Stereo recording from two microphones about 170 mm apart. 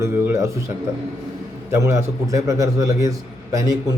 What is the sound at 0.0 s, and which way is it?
Speech, 15° right (ahead or behind).